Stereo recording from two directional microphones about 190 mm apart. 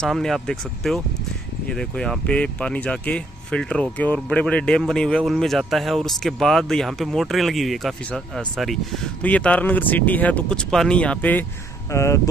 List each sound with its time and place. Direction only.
0.0 s speech: centre (ahead or behind)